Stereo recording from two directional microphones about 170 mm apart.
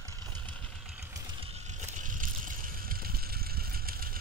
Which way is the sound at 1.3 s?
35° right (ahead or behind).